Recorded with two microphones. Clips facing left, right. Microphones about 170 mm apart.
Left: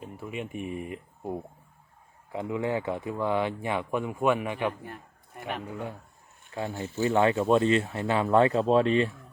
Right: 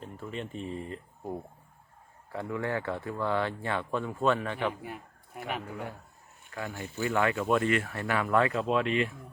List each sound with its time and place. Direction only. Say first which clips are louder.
0.0 s speech: left 2 dB; 10° left (ahead or behind)
4.7 s a man's voice: right 1 dB; 10° right (ahead or behind)
6.5 s speech: left 5 dB; 20° left (ahead or behind)